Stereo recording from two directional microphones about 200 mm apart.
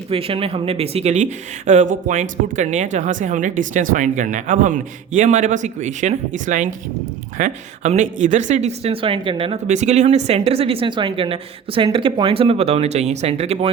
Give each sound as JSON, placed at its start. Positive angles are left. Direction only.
{"t": 0.1, "sound": "speech", "side_deg": -30}